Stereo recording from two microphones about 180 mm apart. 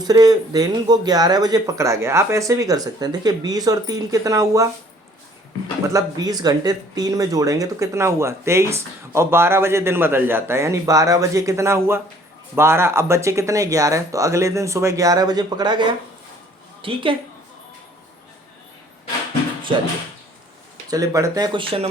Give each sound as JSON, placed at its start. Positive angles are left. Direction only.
{"t": 0.0, "sound": "speech", "side_deg": -20}
{"t": 5.9, "sound": "speech", "side_deg": -20}
{"t": 20.9, "sound": "speech", "side_deg": -15}